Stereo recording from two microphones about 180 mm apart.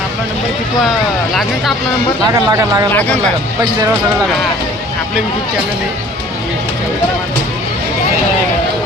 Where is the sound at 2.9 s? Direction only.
10° left (ahead or behind).